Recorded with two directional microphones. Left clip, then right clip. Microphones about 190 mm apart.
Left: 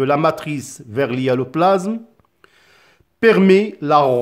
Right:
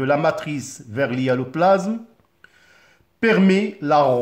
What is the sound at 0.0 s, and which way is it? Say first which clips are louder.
Speech: left 3 dB; 40° left (ahead or behind).